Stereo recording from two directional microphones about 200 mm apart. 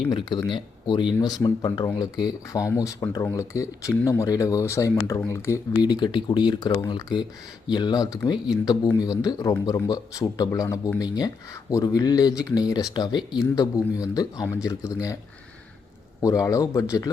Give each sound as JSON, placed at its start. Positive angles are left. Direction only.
{"t": 0.1, "sound": "speech", "side_deg": 20}
{"t": 16.2, "sound": "speech", "side_deg": 15}